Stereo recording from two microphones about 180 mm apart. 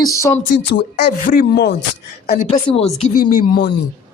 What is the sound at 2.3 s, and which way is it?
Speech, 35° left (ahead or behind).